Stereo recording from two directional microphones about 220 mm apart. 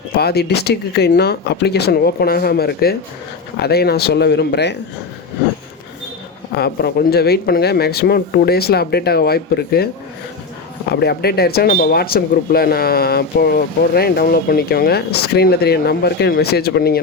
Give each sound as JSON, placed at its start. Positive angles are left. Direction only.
{"t": 0.2, "sound": "speech", "side_deg": 45}
{"t": 6.5, "sound": "speech", "side_deg": 45}
{"t": 11.0, "sound": "speech", "side_deg": 45}